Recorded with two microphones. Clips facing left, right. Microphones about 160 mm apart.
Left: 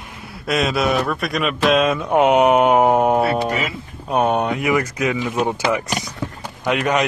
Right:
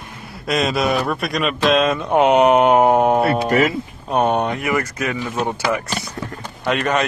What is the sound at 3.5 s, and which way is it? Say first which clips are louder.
Speech: right 6 dB; 60° right (ahead or behind).